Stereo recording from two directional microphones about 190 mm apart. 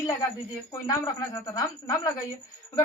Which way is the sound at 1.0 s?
20° left (ahead or behind).